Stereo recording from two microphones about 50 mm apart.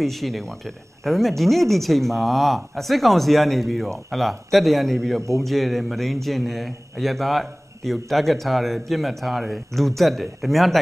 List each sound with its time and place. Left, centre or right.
0.0 s a man's voice: centre